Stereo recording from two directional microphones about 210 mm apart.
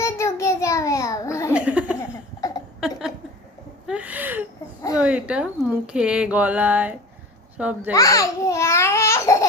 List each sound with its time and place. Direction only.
0.0 s child singing: 15° left (ahead or behind)
1.5 s laughter: 5° right (ahead or behind)
2.0 s laughter: 15° left (ahead or behind)
3.8 s a sound: 5° right (ahead or behind)
7.5 s a child's voice: 5° right (ahead or behind)
7.9 s speech: 15° left (ahead or behind)